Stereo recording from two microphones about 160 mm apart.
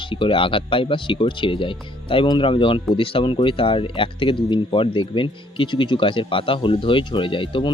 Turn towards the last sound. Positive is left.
turn(degrees=30)  # may be behind; listen again after turning